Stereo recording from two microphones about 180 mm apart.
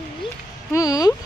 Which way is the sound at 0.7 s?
20° left (ahead or behind).